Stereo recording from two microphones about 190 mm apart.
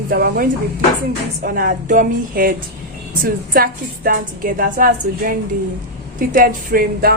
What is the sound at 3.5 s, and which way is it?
A woman's voice, 50° right (ahead or behind).